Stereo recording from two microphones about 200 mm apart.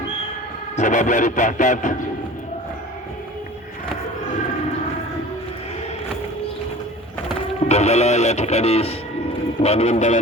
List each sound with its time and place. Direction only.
0.8 s speech: 35° left (ahead or behind)
7.7 s speech: 35° left (ahead or behind)